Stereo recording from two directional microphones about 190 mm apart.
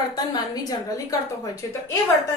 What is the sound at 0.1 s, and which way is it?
Speech, 20° left (ahead or behind).